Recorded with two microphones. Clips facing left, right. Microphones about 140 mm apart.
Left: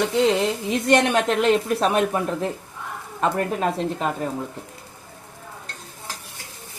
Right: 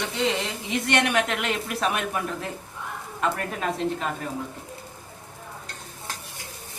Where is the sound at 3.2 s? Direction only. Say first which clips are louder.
Left 5 dB; 35° left (ahead or behind).